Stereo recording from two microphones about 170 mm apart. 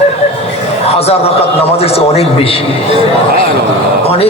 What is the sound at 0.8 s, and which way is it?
A man's voice, 35° left (ahead or behind).